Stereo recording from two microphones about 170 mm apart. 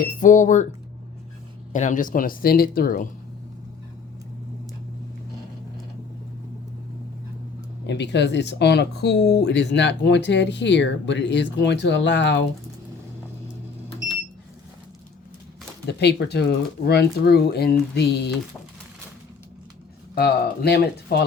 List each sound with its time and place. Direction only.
0.0 s speech: 50° left (ahead or behind)
1.7 s speech: 45° left (ahead or behind)
7.9 s speech: 90° left
15.9 s speech: 80° left
20.1 s speech: 65° left (ahead or behind)